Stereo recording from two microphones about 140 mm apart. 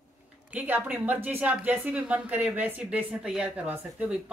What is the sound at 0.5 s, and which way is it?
Speech, 10° right (ahead or behind).